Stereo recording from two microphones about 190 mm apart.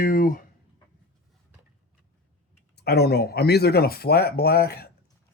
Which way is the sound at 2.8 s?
55° left (ahead or behind).